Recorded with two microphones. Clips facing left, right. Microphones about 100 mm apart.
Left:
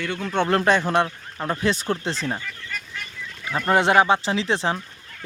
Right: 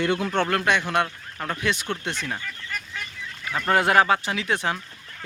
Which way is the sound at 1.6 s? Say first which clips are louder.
Left 4 dB; 35° left (ahead or behind).